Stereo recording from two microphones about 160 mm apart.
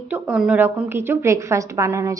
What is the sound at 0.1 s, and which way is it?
A woman's voice, 5° right (ahead or behind).